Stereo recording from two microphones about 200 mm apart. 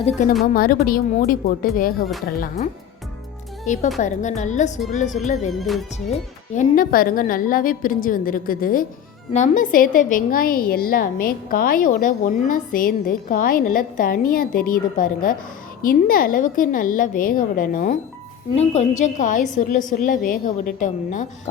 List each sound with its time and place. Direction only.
0.0 s a woman's voice: 35° left (ahead or behind)
3.7 s a woman's voice: 40° left (ahead or behind)
5.5 s music: centre (ahead or behind)
6.6 s a woman's voice: 45° left (ahead or behind)
18.5 s a woman's voice: 30° left (ahead or behind)